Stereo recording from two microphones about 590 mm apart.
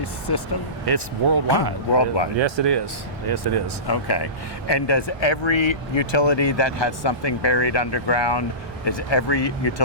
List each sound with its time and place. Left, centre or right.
0.3 s speech: left
0.9 s speech: right
1.9 s speech: left
2.4 s speech: right
3.8 s speech: left